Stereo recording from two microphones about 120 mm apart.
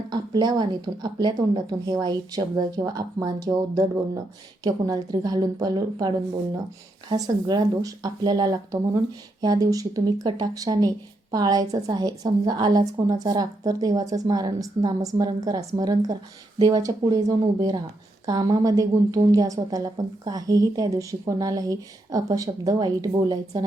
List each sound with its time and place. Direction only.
0.1 s a woman's voice: 35° right (ahead or behind)